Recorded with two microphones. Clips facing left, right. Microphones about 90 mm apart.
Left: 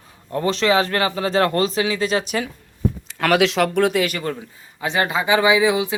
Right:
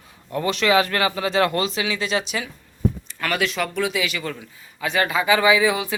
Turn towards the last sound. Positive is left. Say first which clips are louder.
# left 2 dB
turn(degrees=20)  # may be behind; listen again after turning